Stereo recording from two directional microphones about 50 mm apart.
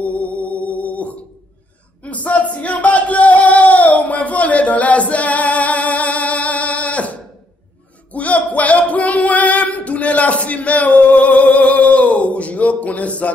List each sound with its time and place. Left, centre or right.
0.0 s music: left
2.0 s a sound: left
8.1 s music: left